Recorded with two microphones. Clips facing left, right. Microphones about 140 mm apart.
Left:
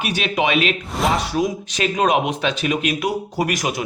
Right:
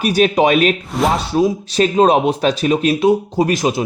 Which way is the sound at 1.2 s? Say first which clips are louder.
Right 5 dB; 30° right (ahead or behind).